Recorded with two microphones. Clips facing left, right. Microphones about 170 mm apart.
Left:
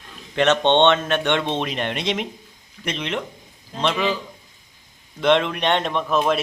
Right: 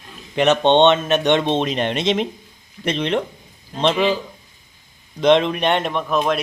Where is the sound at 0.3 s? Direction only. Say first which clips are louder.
Right 2 dB; 15° right (ahead or behind).